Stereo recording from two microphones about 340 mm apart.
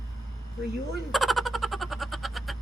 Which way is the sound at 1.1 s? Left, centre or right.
Centre.